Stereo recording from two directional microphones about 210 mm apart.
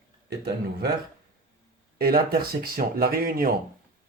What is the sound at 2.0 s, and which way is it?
Speech, 45° right (ahead or behind).